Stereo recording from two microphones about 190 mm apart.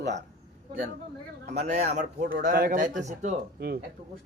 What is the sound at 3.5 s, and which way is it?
Speech, 55° right (ahead or behind).